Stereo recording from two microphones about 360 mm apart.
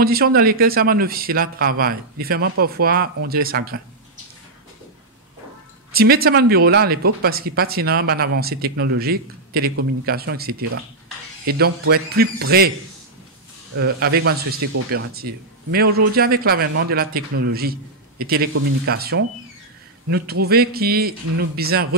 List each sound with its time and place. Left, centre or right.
0.0 s speech: right
5.9 s speech: right
13.7 s speech: right